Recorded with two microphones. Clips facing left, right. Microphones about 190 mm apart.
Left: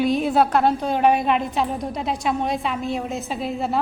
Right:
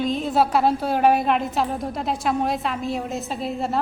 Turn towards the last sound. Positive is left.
turn(degrees=0)  # may be behind; listen again after turning